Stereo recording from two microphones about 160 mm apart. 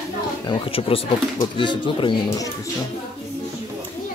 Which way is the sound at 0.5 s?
35° left (ahead or behind).